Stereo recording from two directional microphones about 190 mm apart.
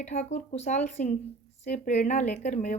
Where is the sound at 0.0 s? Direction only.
40° left (ahead or behind).